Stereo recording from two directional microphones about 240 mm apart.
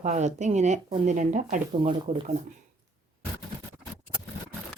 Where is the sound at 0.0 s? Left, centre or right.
Right.